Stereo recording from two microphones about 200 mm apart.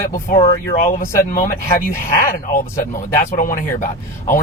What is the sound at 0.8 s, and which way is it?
Speech, 45° left (ahead or behind).